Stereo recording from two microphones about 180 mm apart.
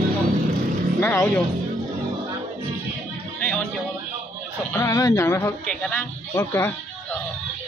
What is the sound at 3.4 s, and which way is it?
Music, 10° left (ahead or behind).